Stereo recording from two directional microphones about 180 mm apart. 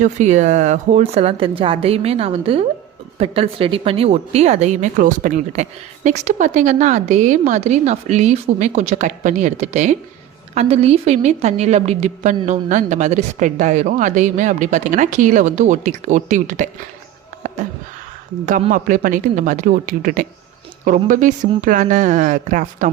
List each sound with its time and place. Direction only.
0.0 s a woman's voice: 40° right (ahead or behind)
18.7 s speech: 50° right (ahead or behind)